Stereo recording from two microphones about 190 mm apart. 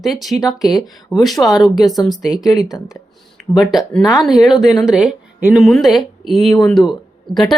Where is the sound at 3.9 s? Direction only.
Centre (ahead or behind).